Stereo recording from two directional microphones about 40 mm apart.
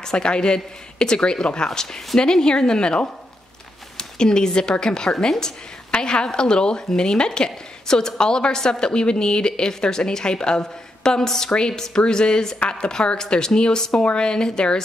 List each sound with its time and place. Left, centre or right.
0.0 s a woman's voice: left